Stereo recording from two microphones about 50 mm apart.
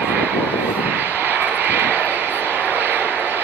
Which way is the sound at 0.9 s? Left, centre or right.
Right.